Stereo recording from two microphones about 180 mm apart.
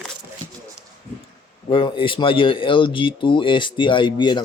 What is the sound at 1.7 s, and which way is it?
Speech, 30° left (ahead or behind).